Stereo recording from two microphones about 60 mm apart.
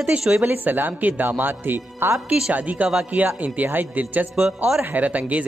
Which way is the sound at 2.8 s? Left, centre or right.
Right.